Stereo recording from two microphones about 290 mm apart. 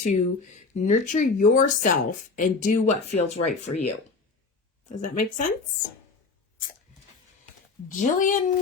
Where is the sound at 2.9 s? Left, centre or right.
Left.